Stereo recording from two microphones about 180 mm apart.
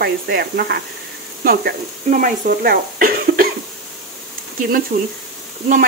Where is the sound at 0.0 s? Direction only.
60° right (ahead or behind).